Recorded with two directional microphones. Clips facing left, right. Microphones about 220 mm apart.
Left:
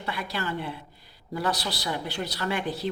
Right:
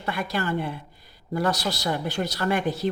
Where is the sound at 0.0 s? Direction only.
50° right (ahead or behind).